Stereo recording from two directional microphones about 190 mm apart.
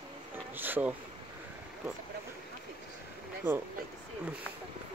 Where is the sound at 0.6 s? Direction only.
10° right (ahead or behind).